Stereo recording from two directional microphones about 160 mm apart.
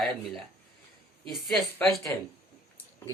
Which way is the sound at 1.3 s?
Centre (ahead or behind).